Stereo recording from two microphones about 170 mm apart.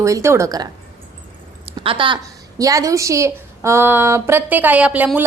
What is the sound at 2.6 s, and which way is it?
A woman's voice, 20° right (ahead or behind).